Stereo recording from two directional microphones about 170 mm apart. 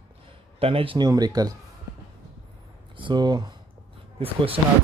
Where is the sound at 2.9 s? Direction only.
25° right (ahead or behind).